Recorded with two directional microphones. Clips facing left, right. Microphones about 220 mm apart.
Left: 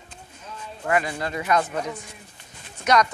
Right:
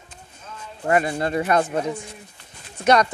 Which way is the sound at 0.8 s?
35° right (ahead or behind).